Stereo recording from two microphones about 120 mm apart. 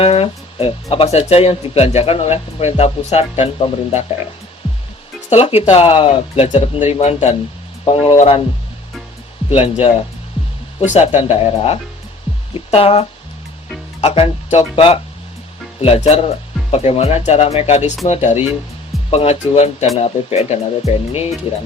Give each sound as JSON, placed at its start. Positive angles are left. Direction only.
{"t": 0.0, "sound": "speech", "side_deg": 50}
{"t": 5.3, "sound": "speech", "side_deg": 55}
{"t": 6.9, "sound": "speech", "side_deg": 60}
{"t": 7.9, "sound": "speech", "side_deg": 50}
{"t": 9.5, "sound": "speech", "side_deg": 55}
{"t": 10.9, "sound": "speech", "side_deg": 55}
{"t": 16.0, "sound": "speech", "side_deg": 70}
{"t": 16.7, "sound": "speech", "side_deg": 55}